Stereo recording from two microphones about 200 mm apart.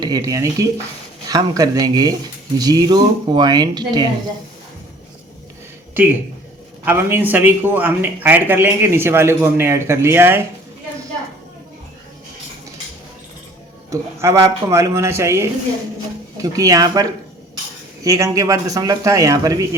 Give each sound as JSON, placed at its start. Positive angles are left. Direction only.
{"t": 0.0, "sound": "speech", "side_deg": -20}
{"t": 5.9, "sound": "speech", "side_deg": -10}
{"t": 13.9, "sound": "speech", "side_deg": -15}